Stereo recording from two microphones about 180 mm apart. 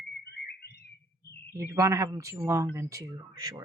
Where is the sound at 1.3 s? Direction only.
60° left (ahead or behind).